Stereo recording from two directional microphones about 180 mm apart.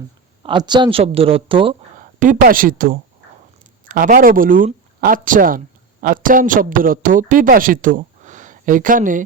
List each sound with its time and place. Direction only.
0.4 s speech: 25° right (ahead or behind)
2.1 s speech: 45° right (ahead or behind)